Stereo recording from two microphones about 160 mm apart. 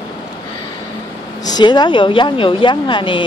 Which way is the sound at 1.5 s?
25° left (ahead or behind).